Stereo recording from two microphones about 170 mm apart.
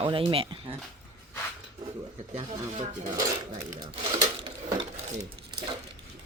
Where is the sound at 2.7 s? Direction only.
45° right (ahead or behind).